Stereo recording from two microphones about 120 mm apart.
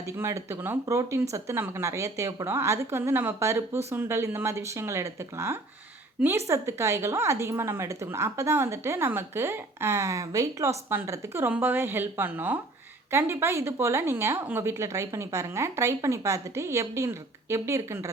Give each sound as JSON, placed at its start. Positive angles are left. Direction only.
{"t": 0.2, "sound": "a woman's voice", "side_deg": -20}